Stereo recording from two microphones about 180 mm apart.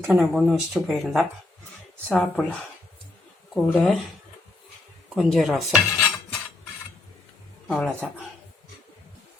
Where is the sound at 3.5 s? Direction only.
5° left (ahead or behind).